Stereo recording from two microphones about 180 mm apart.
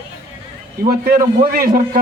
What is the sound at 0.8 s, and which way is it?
Speech, 55° right (ahead or behind).